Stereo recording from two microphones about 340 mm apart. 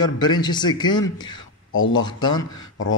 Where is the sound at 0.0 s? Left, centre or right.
Centre.